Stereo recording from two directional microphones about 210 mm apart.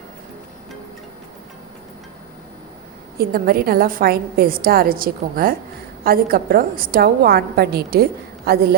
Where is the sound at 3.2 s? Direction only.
45° right (ahead or behind).